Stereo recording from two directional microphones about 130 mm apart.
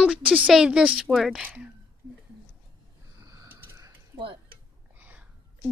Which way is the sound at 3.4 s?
25° right (ahead or behind).